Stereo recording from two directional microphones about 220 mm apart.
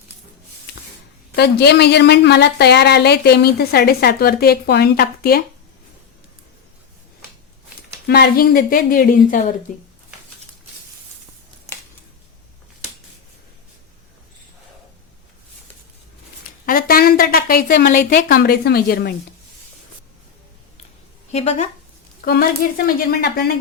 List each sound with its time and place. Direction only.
1.4 s a woman's voice: 50° left (ahead or behind)
8.0 s speech: 45° left (ahead or behind)
16.6 s a woman's voice: 40° left (ahead or behind)
21.3 s speech: 30° left (ahead or behind)
22.2 s a woman's voice: 40° left (ahead or behind)